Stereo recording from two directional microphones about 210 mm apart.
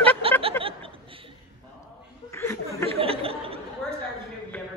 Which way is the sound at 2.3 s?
10° left (ahead or behind).